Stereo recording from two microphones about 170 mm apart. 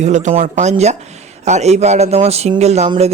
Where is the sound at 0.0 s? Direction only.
45° right (ahead or behind).